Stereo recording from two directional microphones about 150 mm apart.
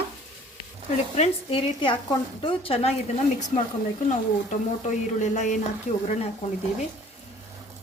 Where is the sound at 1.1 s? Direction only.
40° left (ahead or behind).